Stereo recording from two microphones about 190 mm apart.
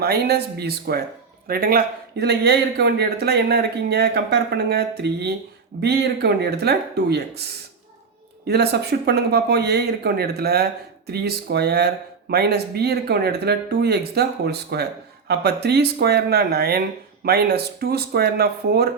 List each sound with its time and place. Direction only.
0.0 s speech: 55° right (ahead or behind)
8.4 s speech: 60° right (ahead or behind)